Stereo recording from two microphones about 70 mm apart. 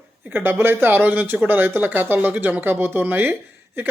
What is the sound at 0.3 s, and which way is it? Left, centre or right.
A man's voice, right.